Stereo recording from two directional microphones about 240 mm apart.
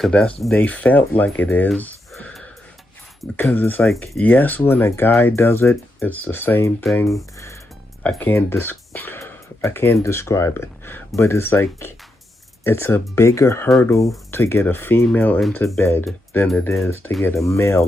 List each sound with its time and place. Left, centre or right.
0.0 s speech: centre
13.7 s speech: centre